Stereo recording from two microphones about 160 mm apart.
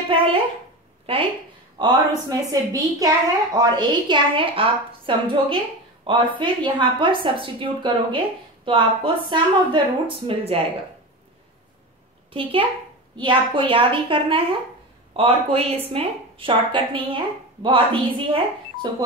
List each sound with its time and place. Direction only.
0.1 s a woman's voice: 35° right (ahead or behind)
12.3 s a woman's voice: 35° right (ahead or behind)